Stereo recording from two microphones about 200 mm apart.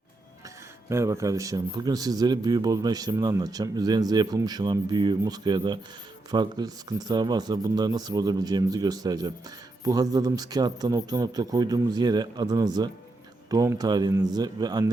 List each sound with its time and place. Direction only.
0.9 s a man's voice: 15° right (ahead or behind)